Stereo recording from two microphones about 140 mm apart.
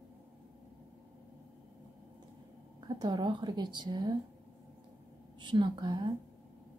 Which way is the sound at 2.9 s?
30° right (ahead or behind).